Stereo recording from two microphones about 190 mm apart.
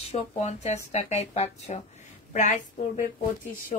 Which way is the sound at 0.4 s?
35° left (ahead or behind).